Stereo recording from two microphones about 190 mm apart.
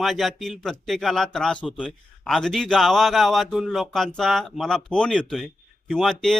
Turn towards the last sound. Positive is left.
turn(degrees=0)  # may be behind; listen again after turning